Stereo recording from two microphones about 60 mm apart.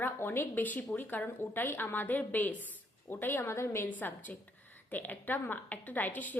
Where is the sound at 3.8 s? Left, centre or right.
Left.